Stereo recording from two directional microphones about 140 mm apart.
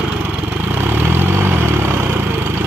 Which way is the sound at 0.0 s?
10° right (ahead or behind).